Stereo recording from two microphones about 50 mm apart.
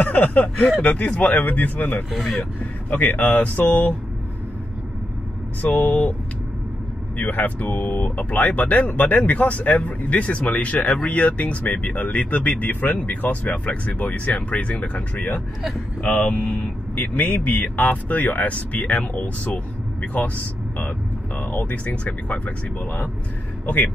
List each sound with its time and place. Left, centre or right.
0.0 s speech: left
2.0 s speech: centre
2.6 s speech: left
5.6 s speech: left
7.2 s speech: left
21.4 s music: left
21.8 s speech: left